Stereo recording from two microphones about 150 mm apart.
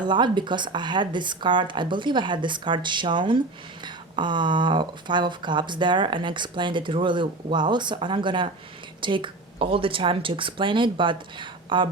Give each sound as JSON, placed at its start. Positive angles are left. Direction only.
{"t": 0.0, "sound": "speech", "side_deg": -30}